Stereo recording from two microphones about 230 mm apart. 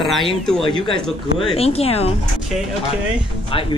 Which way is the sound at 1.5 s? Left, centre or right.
Left.